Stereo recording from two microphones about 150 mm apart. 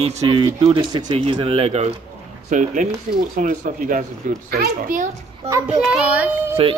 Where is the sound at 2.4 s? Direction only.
60° right (ahead or behind).